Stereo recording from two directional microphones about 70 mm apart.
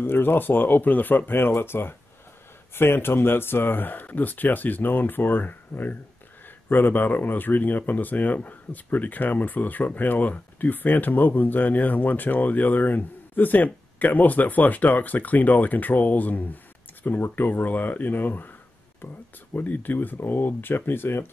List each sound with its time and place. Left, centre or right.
0.0 s speech: left
19.5 s speech: left